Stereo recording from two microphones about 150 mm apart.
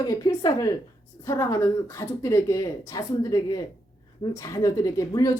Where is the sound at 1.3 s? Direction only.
20° left (ahead or behind).